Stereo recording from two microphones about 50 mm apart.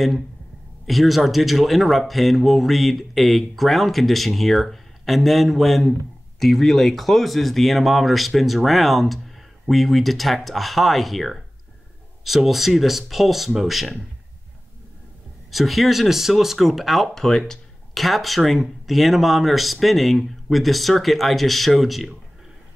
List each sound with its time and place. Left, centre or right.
0.8 s speech: centre
15.5 s speech: centre